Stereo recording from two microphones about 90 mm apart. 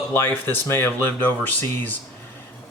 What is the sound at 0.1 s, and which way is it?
A man's voice, 25° left (ahead or behind).